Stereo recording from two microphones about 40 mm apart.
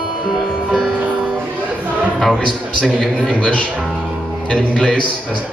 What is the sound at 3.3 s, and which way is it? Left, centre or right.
A man's voice, left.